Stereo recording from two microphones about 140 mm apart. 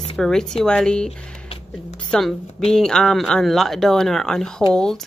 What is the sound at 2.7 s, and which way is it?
Speech, 5° left (ahead or behind).